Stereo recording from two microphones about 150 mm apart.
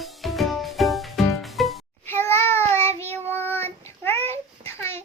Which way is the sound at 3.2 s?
15° left (ahead or behind).